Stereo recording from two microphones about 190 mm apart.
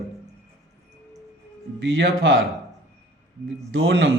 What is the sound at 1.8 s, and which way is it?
Speech, 75° right (ahead or behind).